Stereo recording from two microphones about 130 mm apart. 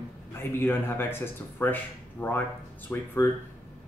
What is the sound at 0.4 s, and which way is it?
Speech, 15° left (ahead or behind).